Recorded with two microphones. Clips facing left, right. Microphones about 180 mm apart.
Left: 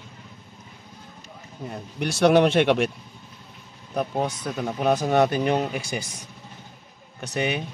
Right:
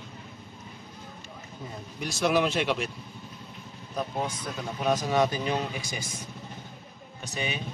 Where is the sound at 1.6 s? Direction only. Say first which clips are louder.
Left 7 dB; 65° left (ahead or behind).